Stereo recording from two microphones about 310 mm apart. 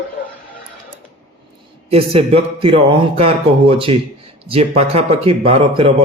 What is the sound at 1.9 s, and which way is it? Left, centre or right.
Speech, centre.